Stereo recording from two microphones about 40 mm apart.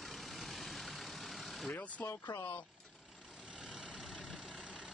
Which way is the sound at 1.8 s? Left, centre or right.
Left.